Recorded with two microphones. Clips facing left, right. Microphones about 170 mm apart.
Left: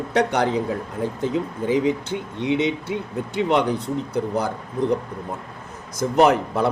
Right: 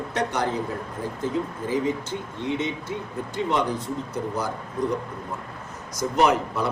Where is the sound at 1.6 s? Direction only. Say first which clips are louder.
Left 6 dB; 70° left (ahead or behind).